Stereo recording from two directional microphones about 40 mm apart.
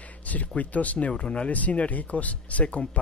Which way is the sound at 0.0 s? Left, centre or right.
Left.